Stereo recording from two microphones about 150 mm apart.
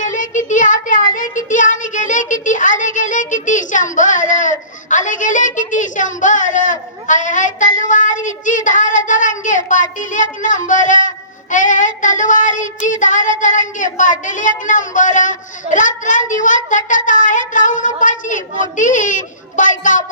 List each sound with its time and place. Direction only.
0.0 s child singing: 55° left (ahead or behind)